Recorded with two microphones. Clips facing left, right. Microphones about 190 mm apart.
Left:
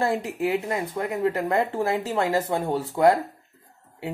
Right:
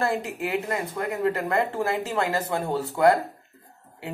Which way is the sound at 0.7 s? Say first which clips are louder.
Left 1 dB; 20° left (ahead or behind).